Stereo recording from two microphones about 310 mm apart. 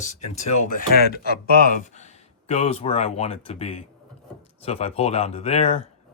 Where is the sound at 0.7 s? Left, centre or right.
Left.